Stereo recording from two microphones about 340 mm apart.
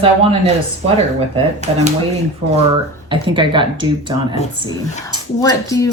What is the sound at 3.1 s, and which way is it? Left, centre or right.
Speech, centre.